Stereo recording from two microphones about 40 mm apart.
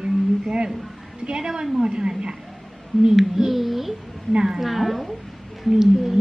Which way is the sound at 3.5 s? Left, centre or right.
Centre.